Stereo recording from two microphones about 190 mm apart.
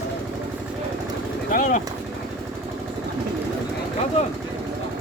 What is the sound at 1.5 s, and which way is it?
Speech, 45° left (ahead or behind).